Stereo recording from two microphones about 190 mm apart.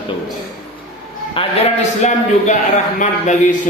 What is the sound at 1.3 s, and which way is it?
A man's voice, 30° left (ahead or behind).